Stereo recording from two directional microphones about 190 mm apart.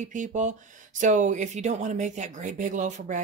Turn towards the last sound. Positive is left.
turn(degrees=-40)  # may be behind; listen again after turning